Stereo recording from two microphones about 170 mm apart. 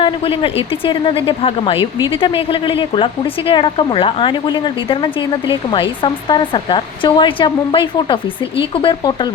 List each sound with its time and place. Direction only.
0.0 s speech: 35° left (ahead or behind)